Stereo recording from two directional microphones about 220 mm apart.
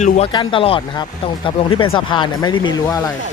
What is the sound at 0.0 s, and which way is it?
Speech, 25° left (ahead or behind).